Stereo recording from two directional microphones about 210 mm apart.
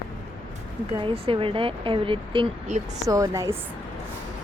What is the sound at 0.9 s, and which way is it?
Speech, 25° right (ahead or behind).